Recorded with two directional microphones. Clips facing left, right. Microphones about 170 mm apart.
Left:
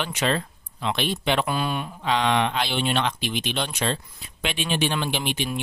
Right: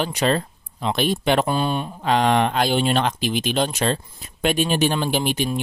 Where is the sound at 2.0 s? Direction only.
45° right (ahead or behind).